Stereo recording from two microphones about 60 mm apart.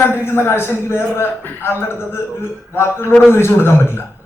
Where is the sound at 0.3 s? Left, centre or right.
Left.